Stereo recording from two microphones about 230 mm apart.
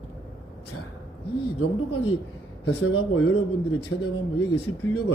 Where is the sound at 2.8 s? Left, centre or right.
Left.